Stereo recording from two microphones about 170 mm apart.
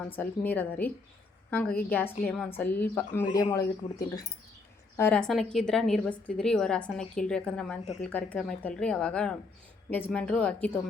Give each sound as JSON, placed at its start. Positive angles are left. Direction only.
{"t": 0.1, "sound": "a woman's voice", "side_deg": 10}
{"t": 3.3, "sound": "a woman's voice", "side_deg": 20}